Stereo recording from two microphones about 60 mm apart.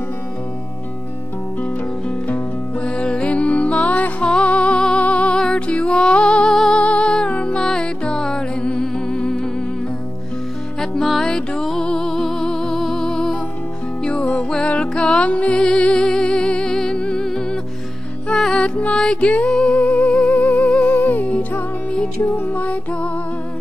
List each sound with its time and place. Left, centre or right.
1.6 s music: left; by 9.5 s centre
10.8 s music: centre
14.0 s music: left
22.2 s music: left